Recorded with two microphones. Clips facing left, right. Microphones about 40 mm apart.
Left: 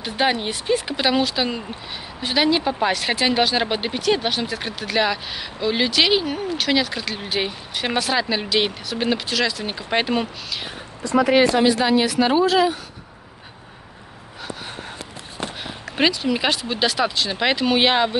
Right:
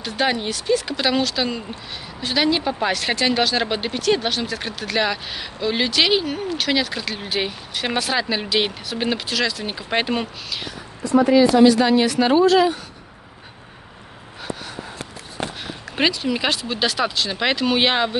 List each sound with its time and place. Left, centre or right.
0.0 s speech: centre
11.1 s speech: left
11.8 s speech: centre
16.0 s speech: centre